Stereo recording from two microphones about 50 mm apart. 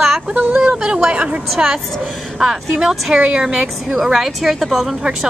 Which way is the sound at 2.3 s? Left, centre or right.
Centre.